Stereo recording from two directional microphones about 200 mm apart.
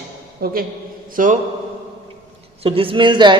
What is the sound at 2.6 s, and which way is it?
Speech, 30° right (ahead or behind).